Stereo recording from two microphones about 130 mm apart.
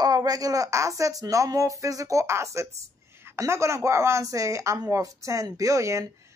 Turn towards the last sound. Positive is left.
turn(degrees=-25)  # may be behind; listen again after turning